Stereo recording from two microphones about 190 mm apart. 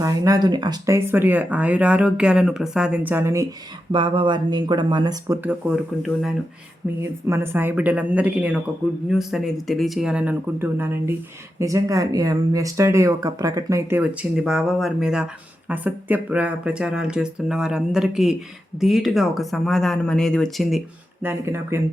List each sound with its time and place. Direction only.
0.0 s speech: 20° right (ahead or behind)
3.9 s speech: 25° right (ahead or behind)
5.4 s speech: 5° right (ahead or behind)
7.0 s speech: 15° right (ahead or behind)